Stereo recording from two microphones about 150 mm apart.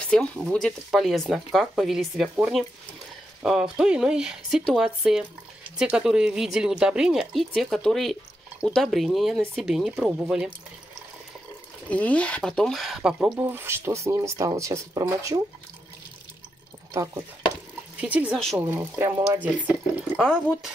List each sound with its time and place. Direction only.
0.1 s speech: 5° left (ahead or behind)
11.9 s speech: 10° left (ahead or behind); by 15.4 s 20° right (ahead or behind)
16.9 s speech: 20° right (ahead or behind)
18.0 s speech: 10° right (ahead or behind)
20.2 s speech: 5° left (ahead or behind)